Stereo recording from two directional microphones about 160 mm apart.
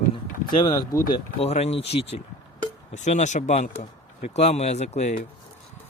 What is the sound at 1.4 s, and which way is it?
Speech, 40° left (ahead or behind).